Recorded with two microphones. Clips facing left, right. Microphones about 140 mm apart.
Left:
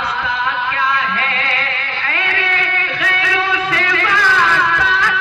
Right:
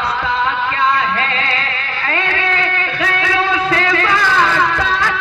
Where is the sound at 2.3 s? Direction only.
35° right (ahead or behind).